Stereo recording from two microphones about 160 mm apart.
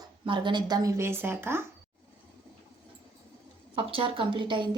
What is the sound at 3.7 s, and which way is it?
Speech, 35° right (ahead or behind).